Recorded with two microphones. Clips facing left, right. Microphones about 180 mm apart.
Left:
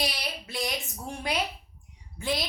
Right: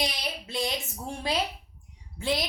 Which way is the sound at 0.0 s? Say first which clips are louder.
Right 1 dB; 20° right (ahead or behind).